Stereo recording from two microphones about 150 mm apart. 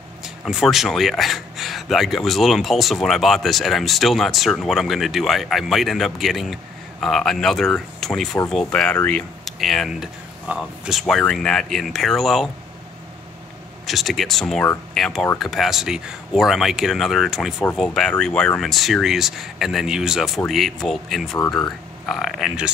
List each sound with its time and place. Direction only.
0.2 s speech: centre (ahead or behind)
13.8 s speech: centre (ahead or behind)